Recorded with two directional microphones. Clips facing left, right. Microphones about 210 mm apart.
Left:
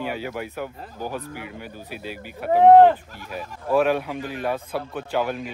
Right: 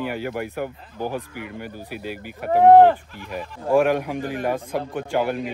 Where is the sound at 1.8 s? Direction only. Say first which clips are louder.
Right 3 dB; 10° right (ahead or behind).